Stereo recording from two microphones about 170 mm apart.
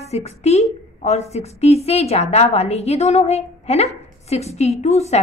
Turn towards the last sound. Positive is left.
turn(degrees=40)  # may be behind; listen again after turning